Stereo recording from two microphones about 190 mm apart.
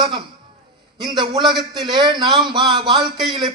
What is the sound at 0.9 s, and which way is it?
A man's voice, 25° right (ahead or behind).